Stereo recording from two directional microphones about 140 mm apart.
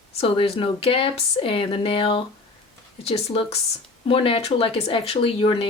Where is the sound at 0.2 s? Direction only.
45° left (ahead or behind).